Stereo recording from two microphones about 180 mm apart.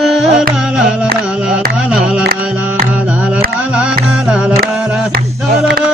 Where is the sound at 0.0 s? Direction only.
Centre (ahead or behind).